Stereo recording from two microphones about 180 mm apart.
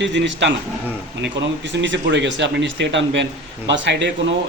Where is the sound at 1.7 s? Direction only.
85° right.